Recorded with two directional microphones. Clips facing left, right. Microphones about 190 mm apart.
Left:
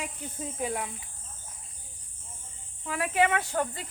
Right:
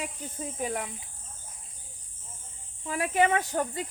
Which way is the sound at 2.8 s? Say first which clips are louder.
Right 1 dB; 35° right (ahead or behind).